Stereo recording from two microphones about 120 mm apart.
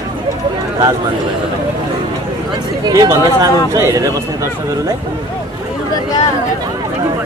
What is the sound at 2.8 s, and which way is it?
Speech, 30° right (ahead or behind).